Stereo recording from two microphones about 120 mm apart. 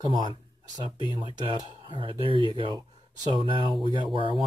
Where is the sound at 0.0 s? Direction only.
40° right (ahead or behind).